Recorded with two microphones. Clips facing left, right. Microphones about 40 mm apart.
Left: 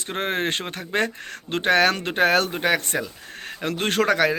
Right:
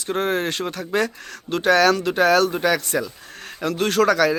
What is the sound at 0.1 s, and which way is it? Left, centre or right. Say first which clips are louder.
A man's voice: right 3 dB; left.